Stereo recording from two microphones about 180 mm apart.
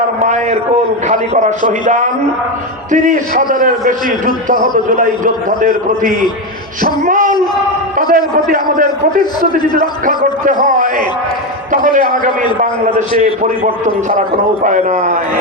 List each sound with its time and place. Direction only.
1.0 s a man's voice: 40° right (ahead or behind)
6.8 s a sound: 50° right (ahead or behind)
7.9 s a man's voice: 50° right (ahead or behind)
11.7 s a man's voice: 50° right (ahead or behind)
14.6 s a man's voice: 45° right (ahead or behind)